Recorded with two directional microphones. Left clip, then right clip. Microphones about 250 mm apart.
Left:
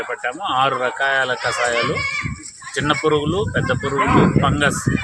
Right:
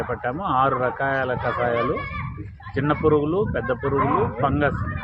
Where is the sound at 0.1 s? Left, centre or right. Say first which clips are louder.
Left 2 dB; left.